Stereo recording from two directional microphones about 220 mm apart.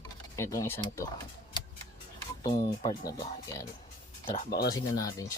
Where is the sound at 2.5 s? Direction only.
25° left (ahead or behind).